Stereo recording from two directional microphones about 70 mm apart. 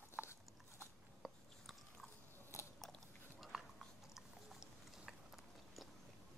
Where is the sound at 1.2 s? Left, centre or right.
Centre.